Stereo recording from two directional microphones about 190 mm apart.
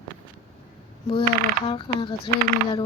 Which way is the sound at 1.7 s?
25° left (ahead or behind).